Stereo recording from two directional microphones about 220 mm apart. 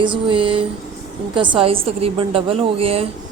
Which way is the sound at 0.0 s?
20° right (ahead or behind).